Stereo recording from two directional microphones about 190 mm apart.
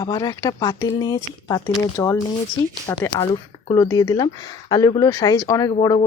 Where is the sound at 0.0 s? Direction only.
20° left (ahead or behind).